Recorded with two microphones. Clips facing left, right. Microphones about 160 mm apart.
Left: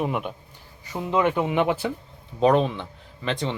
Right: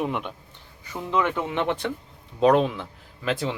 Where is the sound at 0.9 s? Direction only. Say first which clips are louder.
Left 2 dB; 20° left (ahead or behind).